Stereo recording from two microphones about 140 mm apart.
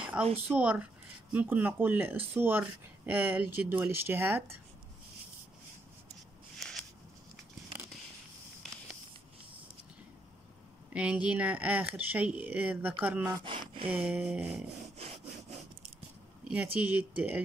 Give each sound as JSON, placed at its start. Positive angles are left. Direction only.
{"t": 0.2, "sound": "speech", "side_deg": -5}
{"t": 10.9, "sound": "speech", "side_deg": -10}
{"t": 13.4, "sound": "a sound", "side_deg": -35}
{"t": 13.8, "sound": "speech", "side_deg": -10}
{"t": 16.4, "sound": "speech", "side_deg": -10}